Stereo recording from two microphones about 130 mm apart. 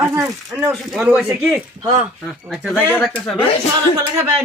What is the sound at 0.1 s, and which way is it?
Speech, 20° right (ahead or behind).